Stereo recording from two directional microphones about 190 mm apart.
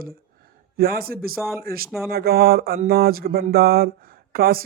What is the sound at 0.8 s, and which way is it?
Speech, 50° right (ahead or behind).